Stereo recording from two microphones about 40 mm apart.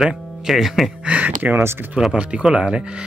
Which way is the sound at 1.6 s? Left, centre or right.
Right.